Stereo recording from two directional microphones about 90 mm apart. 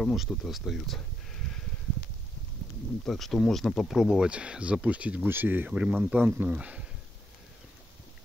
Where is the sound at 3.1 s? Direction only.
5° left (ahead or behind).